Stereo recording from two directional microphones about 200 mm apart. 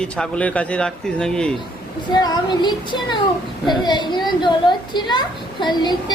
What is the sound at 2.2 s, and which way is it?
Speech, 20° left (ahead or behind).